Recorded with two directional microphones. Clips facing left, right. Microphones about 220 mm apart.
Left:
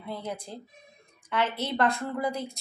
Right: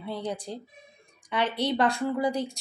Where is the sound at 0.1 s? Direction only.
15° right (ahead or behind).